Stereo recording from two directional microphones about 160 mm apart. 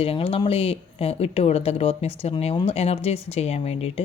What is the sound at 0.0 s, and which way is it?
Speech, 35° left (ahead or behind).